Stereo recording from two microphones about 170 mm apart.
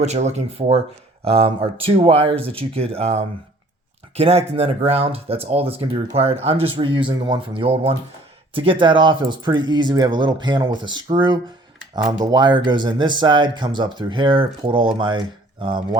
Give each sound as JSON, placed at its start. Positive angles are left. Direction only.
{"t": 0.0, "sound": "speech", "side_deg": -40}